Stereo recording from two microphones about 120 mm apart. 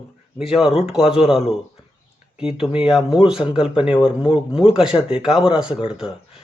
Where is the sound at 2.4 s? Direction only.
5° right (ahead or behind).